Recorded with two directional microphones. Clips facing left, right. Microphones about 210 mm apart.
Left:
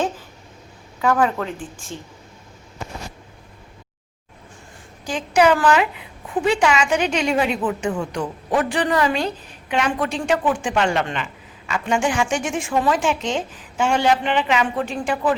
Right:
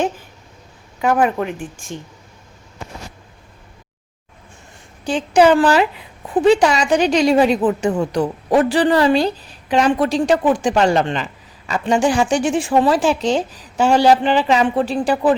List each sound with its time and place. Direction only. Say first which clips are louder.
1.0 s a woman's voice: right 3 dB; 20° right (ahead or behind)
5.0 s a woman's voice: right 4 dB; 30° right (ahead or behind)